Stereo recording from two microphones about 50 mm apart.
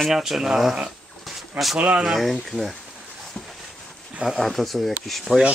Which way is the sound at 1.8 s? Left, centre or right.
Right.